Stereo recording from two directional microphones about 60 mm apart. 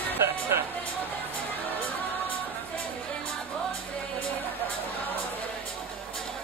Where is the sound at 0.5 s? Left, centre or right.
Right.